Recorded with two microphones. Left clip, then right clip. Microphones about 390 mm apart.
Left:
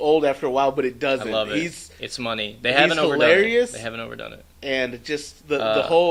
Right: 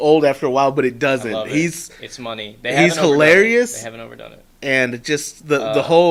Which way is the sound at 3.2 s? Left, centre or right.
Right.